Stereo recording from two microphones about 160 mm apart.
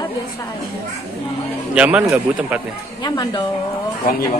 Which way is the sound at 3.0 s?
25° left (ahead or behind).